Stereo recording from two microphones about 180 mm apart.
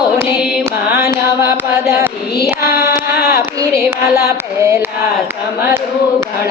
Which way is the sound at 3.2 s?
60° left (ahead or behind).